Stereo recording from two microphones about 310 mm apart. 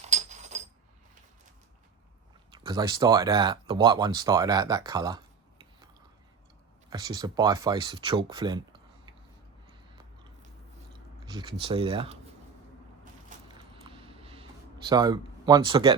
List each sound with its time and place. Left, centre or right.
0.0 s a sound: right
2.6 s speech: centre
6.9 s speech: centre
11.3 s speech: centre
13.5 s a sound: centre
14.8 s speech: centre